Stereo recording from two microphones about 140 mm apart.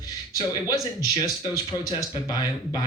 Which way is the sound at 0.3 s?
25° left (ahead or behind).